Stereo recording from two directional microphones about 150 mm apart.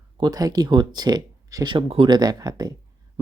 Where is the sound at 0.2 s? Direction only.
25° right (ahead or behind).